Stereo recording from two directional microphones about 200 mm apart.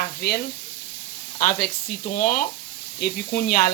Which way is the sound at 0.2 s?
50° left (ahead or behind).